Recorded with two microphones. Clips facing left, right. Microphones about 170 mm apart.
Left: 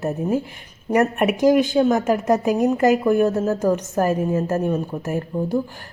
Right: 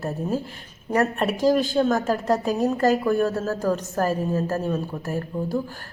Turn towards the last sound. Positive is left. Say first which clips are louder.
# left 4 dB
turn(degrees=20)  # may be behind; listen again after turning